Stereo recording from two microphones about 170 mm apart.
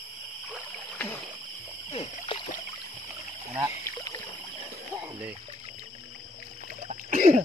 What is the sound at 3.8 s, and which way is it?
Rowboat, 20° left (ahead or behind).